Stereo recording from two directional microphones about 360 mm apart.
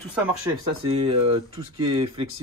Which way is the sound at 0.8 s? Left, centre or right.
Centre.